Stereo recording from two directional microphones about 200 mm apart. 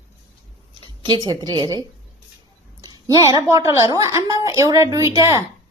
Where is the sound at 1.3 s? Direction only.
25° right (ahead or behind).